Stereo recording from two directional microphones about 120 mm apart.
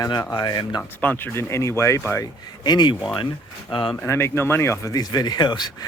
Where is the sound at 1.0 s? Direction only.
15° left (ahead or behind).